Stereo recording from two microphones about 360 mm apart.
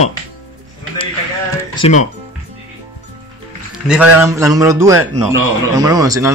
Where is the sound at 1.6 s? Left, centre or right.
Centre.